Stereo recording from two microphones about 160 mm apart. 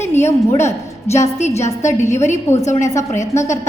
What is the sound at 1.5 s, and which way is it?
A woman's voice, 20° left (ahead or behind).